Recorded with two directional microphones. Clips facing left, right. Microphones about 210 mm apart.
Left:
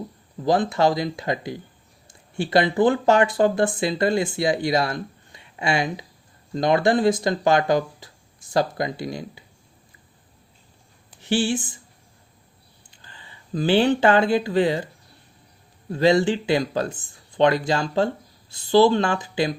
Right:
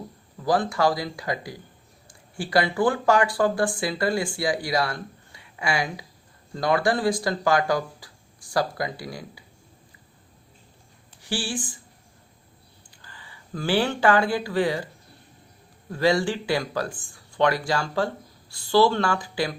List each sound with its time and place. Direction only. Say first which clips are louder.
0.4 s speech: left 3 dB; 20° left (ahead or behind)
11.2 s speech: left 7 dB; 20° left (ahead or behind)
13.0 s speech: left 1 dB; 25° left (ahead or behind)
15.9 s speech: left 4 dB; 20° left (ahead or behind)